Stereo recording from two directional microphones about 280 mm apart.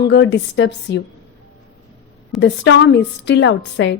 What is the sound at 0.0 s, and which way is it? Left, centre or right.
A woman's voice, left.